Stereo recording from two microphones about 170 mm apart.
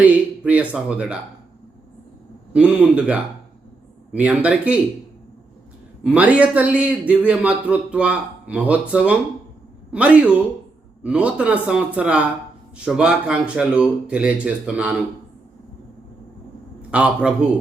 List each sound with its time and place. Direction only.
0.0 s a man's voice: 10° right (ahead or behind)
2.5 s a man's voice: 5° right (ahead or behind)
6.0 s a man's voice: 5° right (ahead or behind)
16.9 s a man's voice: 5° right (ahead or behind)